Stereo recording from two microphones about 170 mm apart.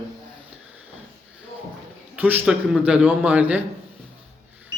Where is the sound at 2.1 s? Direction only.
10° right (ahead or behind).